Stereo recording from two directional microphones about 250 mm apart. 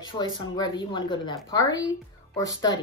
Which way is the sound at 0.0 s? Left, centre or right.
Centre.